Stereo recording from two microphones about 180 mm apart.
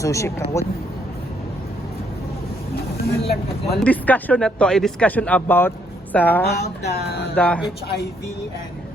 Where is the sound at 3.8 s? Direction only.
10° left (ahead or behind).